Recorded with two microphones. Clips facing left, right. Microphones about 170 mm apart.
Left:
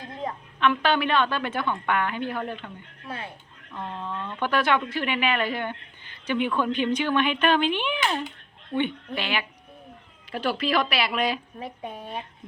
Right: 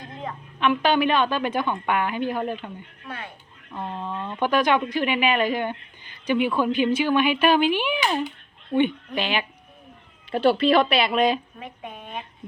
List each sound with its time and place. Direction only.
0.6 s speech: 15° right (ahead or behind)
3.1 s speech: 25° left (ahead or behind)
3.7 s speech: 15° right (ahead or behind)
11.6 s speech: 30° left (ahead or behind)